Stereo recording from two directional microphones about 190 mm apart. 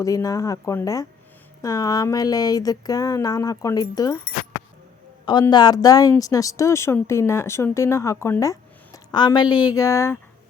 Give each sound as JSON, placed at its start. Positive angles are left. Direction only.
{"t": 0.0, "sound": "speech", "side_deg": 15}
{"t": 5.2, "sound": "speech", "side_deg": 20}